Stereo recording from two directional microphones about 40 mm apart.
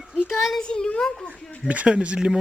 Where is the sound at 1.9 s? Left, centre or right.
Right.